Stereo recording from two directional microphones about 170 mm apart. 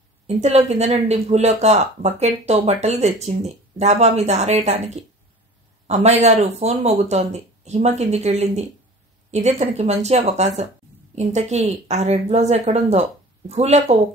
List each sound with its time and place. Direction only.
0.4 s speech: 40° right (ahead or behind)